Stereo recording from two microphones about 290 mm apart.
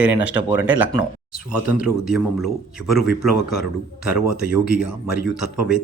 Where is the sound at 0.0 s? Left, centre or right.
Centre.